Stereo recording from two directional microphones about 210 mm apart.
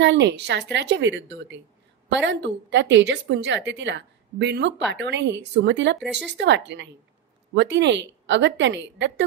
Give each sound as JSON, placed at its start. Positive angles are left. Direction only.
{"t": 0.0, "sound": "a woman's voice", "side_deg": -55}